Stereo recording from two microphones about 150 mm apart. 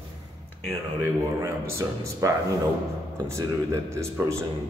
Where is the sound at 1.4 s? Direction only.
20° right (ahead or behind).